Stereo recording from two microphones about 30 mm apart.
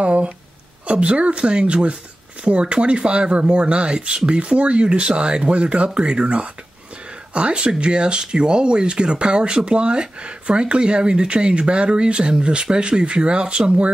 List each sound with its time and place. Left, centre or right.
0.0 s speech: right
7.3 s speech: right